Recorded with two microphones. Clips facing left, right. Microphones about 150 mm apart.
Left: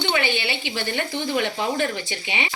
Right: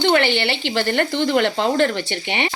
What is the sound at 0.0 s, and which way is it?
Speech, 75° right (ahead or behind).